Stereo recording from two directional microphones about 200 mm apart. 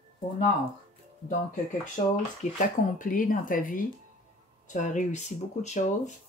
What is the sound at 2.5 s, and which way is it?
Speech, 40° left (ahead or behind).